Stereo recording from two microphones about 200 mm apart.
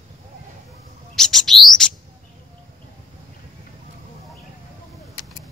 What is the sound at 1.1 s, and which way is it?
Bird, centre (ahead or behind).